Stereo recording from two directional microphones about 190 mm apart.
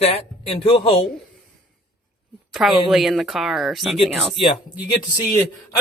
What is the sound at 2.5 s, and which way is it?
Speech, centre (ahead or behind).